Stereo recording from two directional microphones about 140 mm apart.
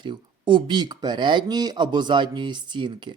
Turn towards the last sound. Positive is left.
turn(degrees=-35)  # may be behind; listen again after turning